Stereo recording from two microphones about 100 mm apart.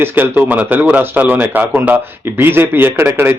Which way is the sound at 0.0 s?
20° right (ahead or behind).